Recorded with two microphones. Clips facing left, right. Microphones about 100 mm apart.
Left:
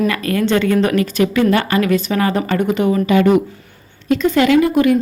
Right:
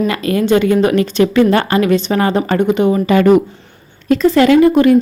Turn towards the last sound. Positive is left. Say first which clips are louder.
# right 4 dB
turn(degrees=-35)  # may be behind; listen again after turning